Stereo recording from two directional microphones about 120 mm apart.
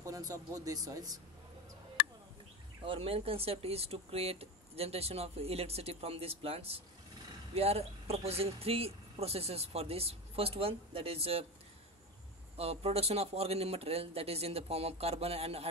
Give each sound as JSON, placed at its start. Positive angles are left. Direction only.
{"t": 0.0, "sound": "speech", "side_deg": -30}
{"t": 2.8, "sound": "speech", "side_deg": -50}
{"t": 12.5, "sound": "speech", "side_deg": -60}